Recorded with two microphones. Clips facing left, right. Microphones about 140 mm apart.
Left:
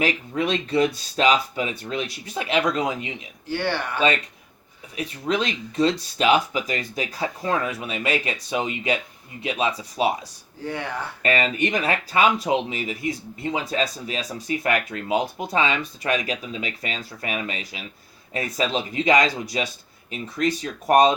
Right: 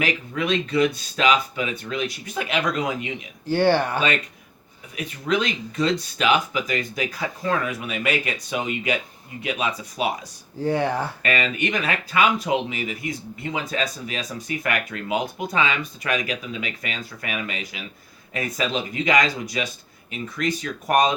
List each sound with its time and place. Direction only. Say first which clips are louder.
0.0 s speech: left 2 dB; 35° left (ahead or behind)
3.5 s speech: right 7 dB; 35° right (ahead or behind)
4.9 s speech: right 1 dB; 30° left (ahead or behind)
10.7 s speech: right 7 dB; 35° right (ahead or behind)
11.2 s speech: left 2 dB; 30° left (ahead or behind)